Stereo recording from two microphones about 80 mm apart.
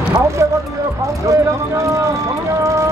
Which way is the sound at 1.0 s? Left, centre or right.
Right.